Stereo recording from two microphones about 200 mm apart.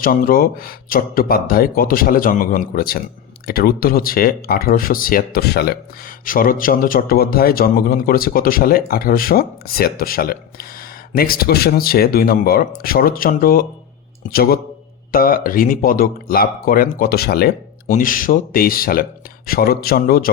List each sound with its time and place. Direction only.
0.0 s speech: 45° left (ahead or behind)
15.1 s speech: 45° left (ahead or behind)